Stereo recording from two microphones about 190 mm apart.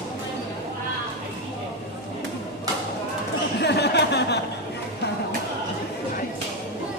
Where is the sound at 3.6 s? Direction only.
60° left (ahead or behind).